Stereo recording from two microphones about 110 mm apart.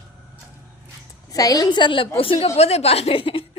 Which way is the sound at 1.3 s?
30° left (ahead or behind).